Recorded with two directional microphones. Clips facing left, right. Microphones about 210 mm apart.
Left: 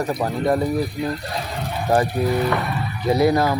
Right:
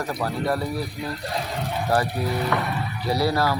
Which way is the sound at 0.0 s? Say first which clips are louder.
Left 4 dB; 20° left (ahead or behind).